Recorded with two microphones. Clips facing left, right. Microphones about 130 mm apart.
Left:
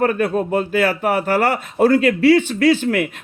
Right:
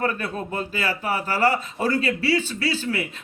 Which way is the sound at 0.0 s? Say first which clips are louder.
Left 9 dB; 50° left (ahead or behind).